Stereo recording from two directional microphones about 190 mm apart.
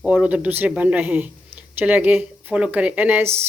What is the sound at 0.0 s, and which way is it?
Speech, 5° right (ahead or behind).